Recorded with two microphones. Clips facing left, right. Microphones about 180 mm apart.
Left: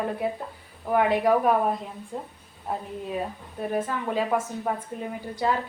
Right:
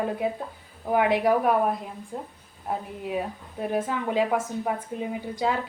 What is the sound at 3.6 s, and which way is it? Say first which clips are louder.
A woman's voice: right 1 dB; 10° right (ahead or behind).